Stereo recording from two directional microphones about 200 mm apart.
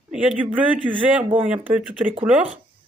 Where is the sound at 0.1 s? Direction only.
5° right (ahead or behind).